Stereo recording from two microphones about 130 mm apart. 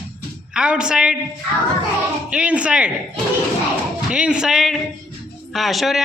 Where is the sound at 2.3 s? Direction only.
10° right (ahead or behind).